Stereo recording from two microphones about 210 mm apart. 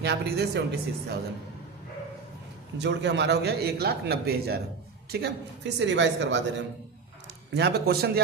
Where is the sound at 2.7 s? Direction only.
55° right (ahead or behind).